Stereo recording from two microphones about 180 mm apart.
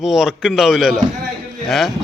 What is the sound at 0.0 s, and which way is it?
A man's voice, centre (ahead or behind).